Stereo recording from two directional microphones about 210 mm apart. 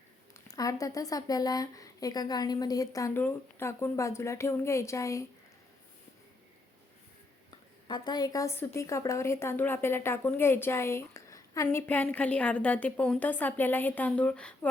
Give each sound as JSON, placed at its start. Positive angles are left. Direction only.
{"t": 0.3, "sound": "a woman's voice", "side_deg": 15}
{"t": 7.9, "sound": "a woman's voice", "side_deg": 20}